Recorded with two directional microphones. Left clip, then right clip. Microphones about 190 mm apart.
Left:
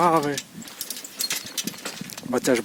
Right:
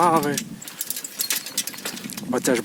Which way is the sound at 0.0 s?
10° right (ahead or behind).